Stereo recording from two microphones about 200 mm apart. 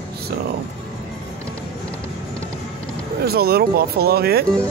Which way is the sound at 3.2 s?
50° right (ahead or behind).